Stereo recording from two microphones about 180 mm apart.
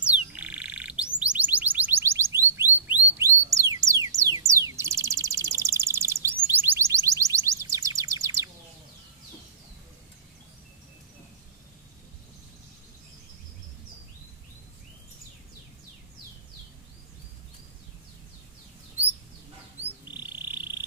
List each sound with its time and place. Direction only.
0.0 s bird: 5° right (ahead or behind)
1.2 s music: 10° right (ahead or behind)
4.2 s a sound: 15° right (ahead or behind)
19.8 s frog: 10° right (ahead or behind)